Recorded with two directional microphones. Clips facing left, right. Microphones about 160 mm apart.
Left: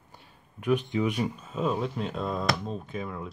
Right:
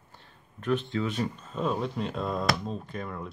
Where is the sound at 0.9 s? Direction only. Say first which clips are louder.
Left 2 dB; 15° left (ahead or behind).